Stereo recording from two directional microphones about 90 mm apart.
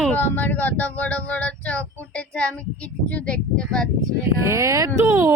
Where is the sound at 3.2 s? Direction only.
10° left (ahead or behind).